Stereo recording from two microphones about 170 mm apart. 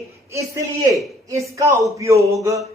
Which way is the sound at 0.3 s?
20° right (ahead or behind).